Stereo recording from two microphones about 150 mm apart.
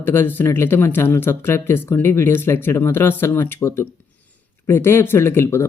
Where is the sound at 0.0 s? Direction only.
15° left (ahead or behind).